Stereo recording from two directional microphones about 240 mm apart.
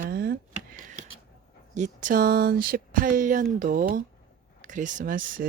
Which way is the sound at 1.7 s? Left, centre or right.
Right.